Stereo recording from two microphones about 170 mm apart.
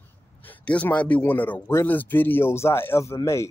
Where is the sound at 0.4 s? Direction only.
10° left (ahead or behind).